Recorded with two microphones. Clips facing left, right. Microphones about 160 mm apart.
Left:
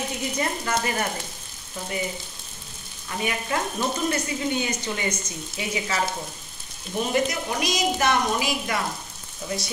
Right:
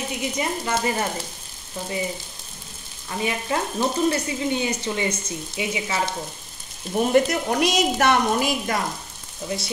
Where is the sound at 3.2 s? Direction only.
25° right (ahead or behind).